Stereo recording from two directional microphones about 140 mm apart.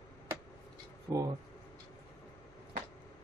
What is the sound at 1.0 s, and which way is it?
Speech, 25° right (ahead or behind).